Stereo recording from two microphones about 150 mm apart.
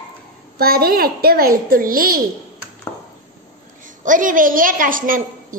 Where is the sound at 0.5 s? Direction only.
90° right; by 2.2 s 75° right (ahead or behind).